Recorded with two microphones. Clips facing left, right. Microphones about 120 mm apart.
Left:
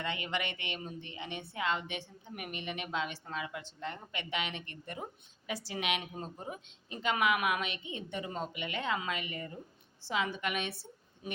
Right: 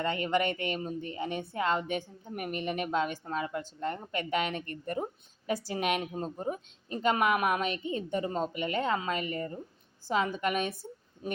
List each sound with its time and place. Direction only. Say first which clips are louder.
0.0 s a woman's voice: right 8 dB; 40° right (ahead or behind)